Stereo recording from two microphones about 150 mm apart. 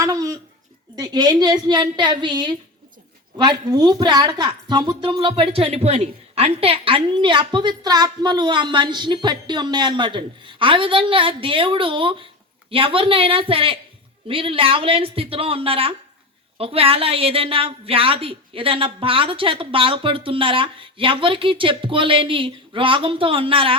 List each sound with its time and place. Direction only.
0.0 s a woman's voice: 25° right (ahead or behind)